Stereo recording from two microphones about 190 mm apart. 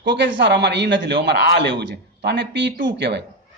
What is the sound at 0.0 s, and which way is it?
A man's voice, 65° right (ahead or behind).